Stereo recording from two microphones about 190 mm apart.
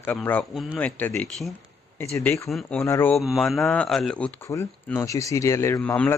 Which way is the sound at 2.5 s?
5° left (ahead or behind).